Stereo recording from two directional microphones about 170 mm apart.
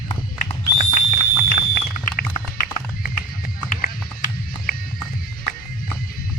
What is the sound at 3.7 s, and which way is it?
Music, 55° left (ahead or behind).